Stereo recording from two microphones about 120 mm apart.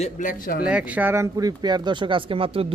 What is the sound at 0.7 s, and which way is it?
Speech, 10° right (ahead or behind).